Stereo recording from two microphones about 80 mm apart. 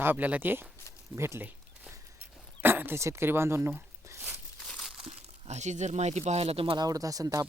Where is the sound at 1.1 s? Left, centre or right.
Right.